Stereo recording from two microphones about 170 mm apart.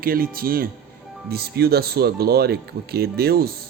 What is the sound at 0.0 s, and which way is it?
Speech, 60° right (ahead or behind).